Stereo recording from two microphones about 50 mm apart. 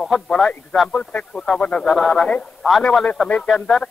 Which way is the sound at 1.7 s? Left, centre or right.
Centre.